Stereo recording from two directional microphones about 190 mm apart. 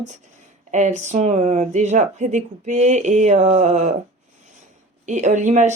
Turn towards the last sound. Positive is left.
turn(degrees=-40)  # may be behind; listen again after turning